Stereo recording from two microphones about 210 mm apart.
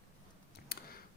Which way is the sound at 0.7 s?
45° left (ahead or behind).